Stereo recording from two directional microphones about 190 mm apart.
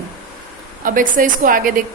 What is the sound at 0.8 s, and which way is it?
Speech, 45° right (ahead or behind).